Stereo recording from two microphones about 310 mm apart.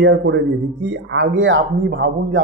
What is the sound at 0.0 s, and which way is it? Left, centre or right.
Speech, right.